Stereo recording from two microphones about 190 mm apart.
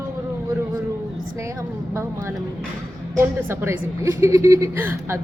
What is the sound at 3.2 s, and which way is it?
A woman's voice, 10° right (ahead or behind).